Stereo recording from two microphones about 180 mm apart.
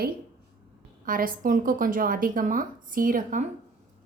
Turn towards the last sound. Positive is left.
turn(degrees=-50)  # may be behind; listen again after turning